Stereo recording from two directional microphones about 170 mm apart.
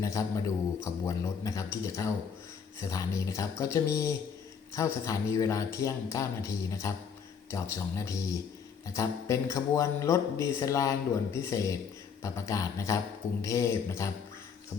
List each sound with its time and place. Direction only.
0.0 s a man's voice: 20° left (ahead or behind)